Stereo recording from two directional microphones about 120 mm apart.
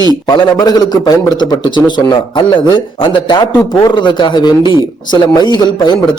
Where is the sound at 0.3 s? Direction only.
35° left (ahead or behind).